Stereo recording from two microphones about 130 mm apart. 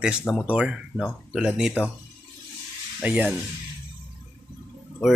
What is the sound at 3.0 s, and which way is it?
Speech, 10° right (ahead or behind).